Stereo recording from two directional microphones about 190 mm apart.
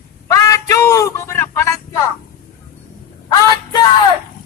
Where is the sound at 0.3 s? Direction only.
15° left (ahead or behind).